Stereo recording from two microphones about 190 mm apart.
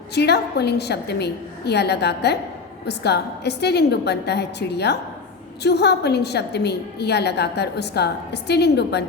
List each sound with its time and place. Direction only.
0.1 s a woman's voice: 60° left (ahead or behind)